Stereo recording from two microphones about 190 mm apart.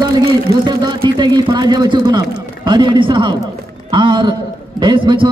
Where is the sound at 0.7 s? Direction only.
20° right (ahead or behind).